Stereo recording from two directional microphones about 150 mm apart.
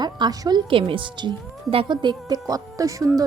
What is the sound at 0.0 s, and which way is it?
A woman's voice, 25° right (ahead or behind).